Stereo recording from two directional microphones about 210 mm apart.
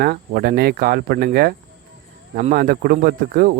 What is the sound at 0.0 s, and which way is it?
Speech, 45° right (ahead or behind).